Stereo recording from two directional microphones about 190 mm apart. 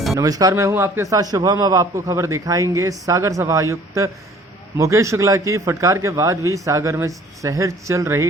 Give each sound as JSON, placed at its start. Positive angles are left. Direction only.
{"t": 0.2, "sound": "a man's voice", "side_deg": -20}